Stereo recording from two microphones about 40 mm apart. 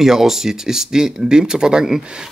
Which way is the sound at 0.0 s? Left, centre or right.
Centre.